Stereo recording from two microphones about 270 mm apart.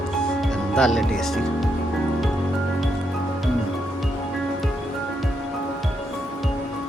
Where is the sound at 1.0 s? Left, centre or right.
Centre.